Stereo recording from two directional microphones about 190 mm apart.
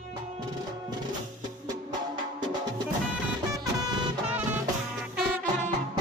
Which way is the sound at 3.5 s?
10° right (ahead or behind).